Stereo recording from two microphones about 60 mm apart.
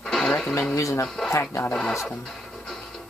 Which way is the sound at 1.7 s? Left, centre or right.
Centre.